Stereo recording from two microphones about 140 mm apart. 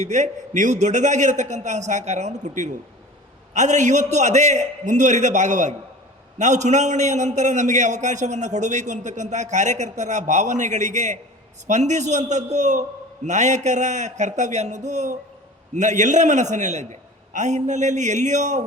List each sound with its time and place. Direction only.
0.0 s a man's voice: 60° right (ahead or behind)